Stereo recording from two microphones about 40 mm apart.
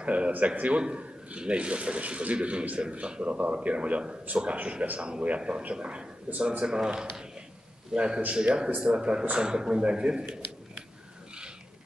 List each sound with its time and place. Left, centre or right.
0.0 s a man's voice: right
4.3 s a man's voice: right
4.9 s a man's voice: right
6.6 s a man's voice: centre
8.3 s a man's voice: right